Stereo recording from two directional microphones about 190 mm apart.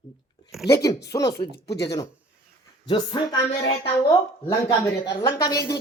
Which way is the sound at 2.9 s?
25° left (ahead or behind).